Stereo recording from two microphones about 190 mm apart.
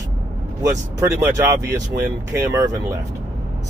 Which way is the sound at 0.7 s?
15° right (ahead or behind).